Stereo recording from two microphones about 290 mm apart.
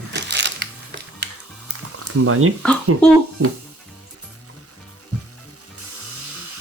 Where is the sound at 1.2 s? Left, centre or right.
Right.